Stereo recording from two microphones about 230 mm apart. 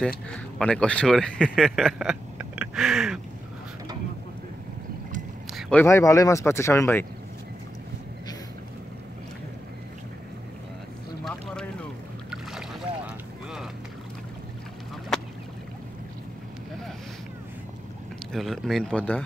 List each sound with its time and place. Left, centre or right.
0.6 s speech: centre
5.5 s speech: centre
12.3 s boat: centre
15.1 s duck: centre
18.3 s a sound: centre